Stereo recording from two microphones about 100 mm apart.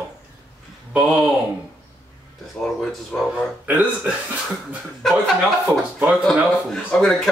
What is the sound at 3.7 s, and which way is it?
Speech, 15° right (ahead or behind).